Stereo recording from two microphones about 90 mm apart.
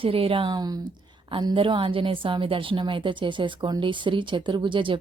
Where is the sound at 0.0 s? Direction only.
90° right.